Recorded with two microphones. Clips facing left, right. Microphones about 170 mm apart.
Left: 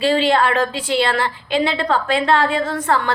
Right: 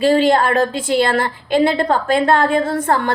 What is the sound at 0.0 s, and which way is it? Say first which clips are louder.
A woman's voice: right 3 dB; 45° right (ahead or behind).